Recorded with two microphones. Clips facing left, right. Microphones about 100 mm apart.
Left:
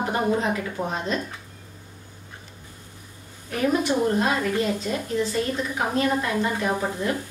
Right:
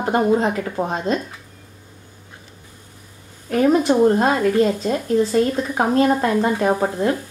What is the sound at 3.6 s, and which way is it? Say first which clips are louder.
Speech: right 7 dB; 40° right (ahead or behind).